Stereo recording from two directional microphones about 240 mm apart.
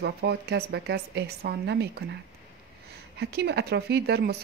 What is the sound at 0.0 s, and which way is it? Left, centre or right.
Speech, right.